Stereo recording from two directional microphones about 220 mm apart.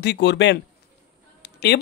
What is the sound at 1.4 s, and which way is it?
Fowl, 50° left (ahead or behind).